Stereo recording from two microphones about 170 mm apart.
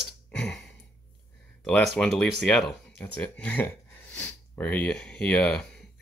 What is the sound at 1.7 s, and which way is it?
Speech, 10° left (ahead or behind).